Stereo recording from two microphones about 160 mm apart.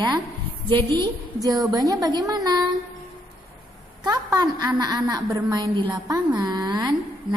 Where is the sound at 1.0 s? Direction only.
20° right (ahead or behind).